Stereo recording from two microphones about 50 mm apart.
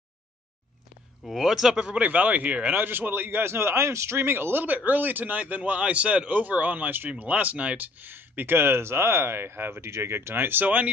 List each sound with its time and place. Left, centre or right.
1.2 s speech: centre
2.0 s speech: right
2.8 s speech: right
4.6 s a man's voice: right